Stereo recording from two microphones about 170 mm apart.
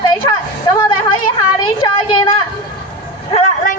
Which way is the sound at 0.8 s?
30° left (ahead or behind).